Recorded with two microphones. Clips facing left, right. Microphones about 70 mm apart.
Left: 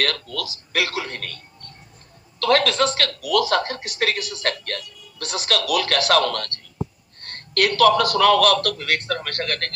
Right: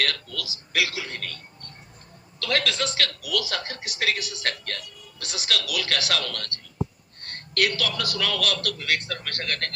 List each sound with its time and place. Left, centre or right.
0.0 s a man's voice: left
2.4 s a man's voice: left